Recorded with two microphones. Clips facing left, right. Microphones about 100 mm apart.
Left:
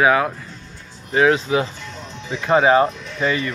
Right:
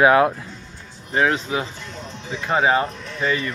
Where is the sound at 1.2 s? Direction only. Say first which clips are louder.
Left 4 dB; 15° left (ahead or behind).